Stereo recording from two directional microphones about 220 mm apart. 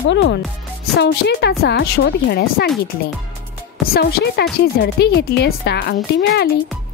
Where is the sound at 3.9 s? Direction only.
45° left (ahead or behind).